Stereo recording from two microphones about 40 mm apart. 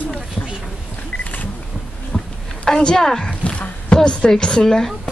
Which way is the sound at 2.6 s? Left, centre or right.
Left.